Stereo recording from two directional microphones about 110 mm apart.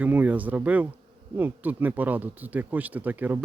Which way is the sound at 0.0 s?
15° right (ahead or behind).